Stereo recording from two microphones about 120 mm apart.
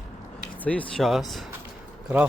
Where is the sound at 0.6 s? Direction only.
10° left (ahead or behind).